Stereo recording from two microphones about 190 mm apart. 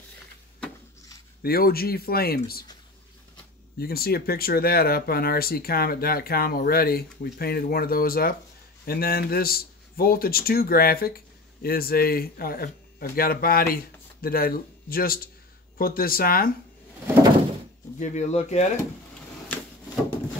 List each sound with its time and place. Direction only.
1.4 s speech: 55° left (ahead or behind)
3.7 s speech: 55° left (ahead or behind)
17.9 s speech: 40° left (ahead or behind)